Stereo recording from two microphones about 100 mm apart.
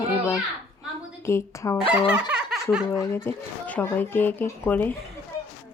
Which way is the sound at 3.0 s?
25° left (ahead or behind).